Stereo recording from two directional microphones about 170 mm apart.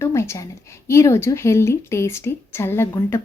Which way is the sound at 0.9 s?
15° left (ahead or behind).